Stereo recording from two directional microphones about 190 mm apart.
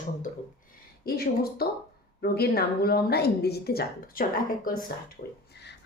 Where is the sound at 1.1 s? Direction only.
55° left (ahead or behind).